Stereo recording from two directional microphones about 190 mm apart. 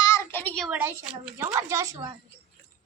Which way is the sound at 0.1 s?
10° left (ahead or behind).